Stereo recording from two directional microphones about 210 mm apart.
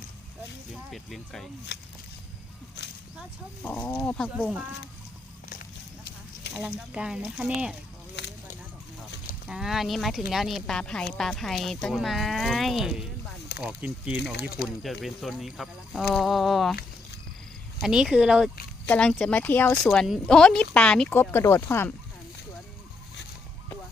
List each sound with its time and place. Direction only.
0.9 s speech: centre (ahead or behind)
1.7 s speech: 55° left (ahead or behind)
3.6 s speech: 10° left (ahead or behind)
6.6 s speech: 5° right (ahead or behind)
9.5 s speech: centre (ahead or behind)
17.7 s speech: 5° right (ahead or behind)